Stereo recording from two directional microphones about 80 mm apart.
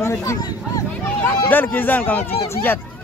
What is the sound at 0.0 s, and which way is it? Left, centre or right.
Speech, left.